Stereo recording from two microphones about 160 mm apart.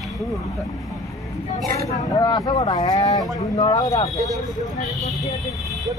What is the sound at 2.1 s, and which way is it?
Speech, 25° left (ahead or behind).